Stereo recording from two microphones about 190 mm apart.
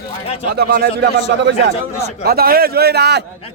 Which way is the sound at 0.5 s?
55° right (ahead or behind).